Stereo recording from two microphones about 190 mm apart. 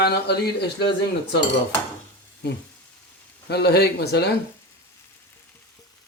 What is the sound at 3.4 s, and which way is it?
Speech, 60° left (ahead or behind).